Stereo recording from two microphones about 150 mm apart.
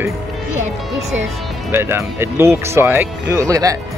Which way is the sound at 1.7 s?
15° right (ahead or behind).